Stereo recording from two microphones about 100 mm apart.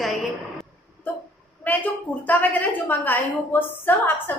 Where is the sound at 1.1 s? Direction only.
15° left (ahead or behind).